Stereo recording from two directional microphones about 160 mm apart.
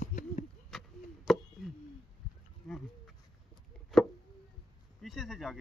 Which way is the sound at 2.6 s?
5° left (ahead or behind).